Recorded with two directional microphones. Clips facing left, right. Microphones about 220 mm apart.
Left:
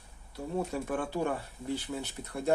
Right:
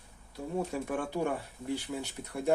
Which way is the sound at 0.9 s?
10° right (ahead or behind).